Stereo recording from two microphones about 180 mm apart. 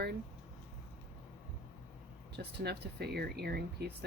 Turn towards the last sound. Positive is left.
turn(degrees=-65)  # may be behind; listen again after turning